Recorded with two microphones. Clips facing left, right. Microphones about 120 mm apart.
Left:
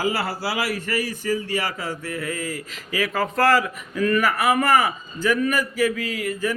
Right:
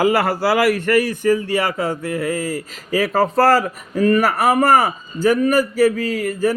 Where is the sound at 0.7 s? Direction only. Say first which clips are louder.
Right 9 dB; 65° right (ahead or behind); by 6.5 s 40° right (ahead or behind).